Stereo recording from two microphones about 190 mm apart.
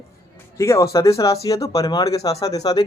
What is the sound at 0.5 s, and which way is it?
A man's voice, 15° left (ahead or behind).